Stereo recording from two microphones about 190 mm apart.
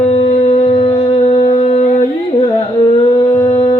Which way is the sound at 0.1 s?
35° left (ahead or behind).